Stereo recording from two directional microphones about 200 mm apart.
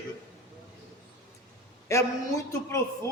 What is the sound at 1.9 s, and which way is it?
Speech, 15° left (ahead or behind).